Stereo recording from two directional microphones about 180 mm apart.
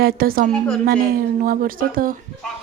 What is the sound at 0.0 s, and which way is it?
A woman's voice, 55° right (ahead or behind).